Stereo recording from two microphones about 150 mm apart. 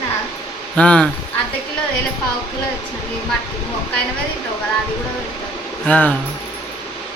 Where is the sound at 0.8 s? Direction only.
10° left (ahead or behind).